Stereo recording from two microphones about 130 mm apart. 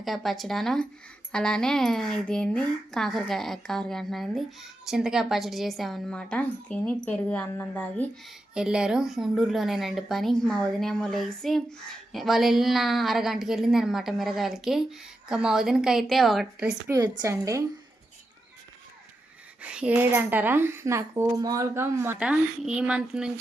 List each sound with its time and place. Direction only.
0.0 s speech: centre (ahead or behind)
8.5 s speech: 5° right (ahead or behind)
16.9 s a woman's voice: 25° right (ahead or behind)
19.6 s speech: 10° right (ahead or behind)
22.2 s speech: 5° right (ahead or behind)